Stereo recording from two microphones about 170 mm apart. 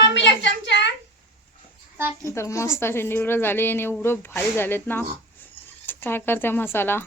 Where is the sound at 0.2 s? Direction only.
90° left.